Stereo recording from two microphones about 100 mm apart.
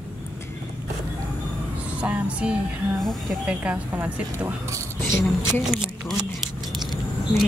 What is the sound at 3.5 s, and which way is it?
Speech, 15° right (ahead or behind).